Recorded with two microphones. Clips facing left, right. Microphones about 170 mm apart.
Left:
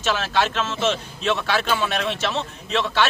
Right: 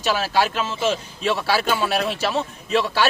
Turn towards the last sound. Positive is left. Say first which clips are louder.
# right 2 dB
turn(degrees=-10)  # may be behind; listen again after turning